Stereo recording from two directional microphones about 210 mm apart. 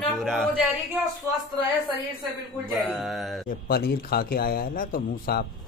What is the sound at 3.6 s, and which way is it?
A man's voice, 45° left (ahead or behind).